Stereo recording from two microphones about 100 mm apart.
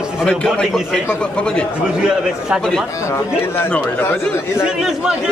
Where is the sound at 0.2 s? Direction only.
5° left (ahead or behind).